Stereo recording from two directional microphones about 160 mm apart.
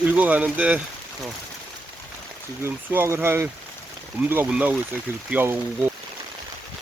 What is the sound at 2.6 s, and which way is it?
Speech, 15° right (ahead or behind).